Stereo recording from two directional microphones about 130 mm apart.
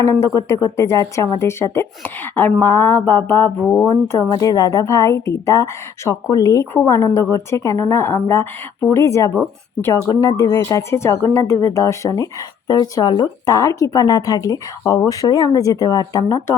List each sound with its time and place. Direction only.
0.0 s a woman's voice: 25° left (ahead or behind)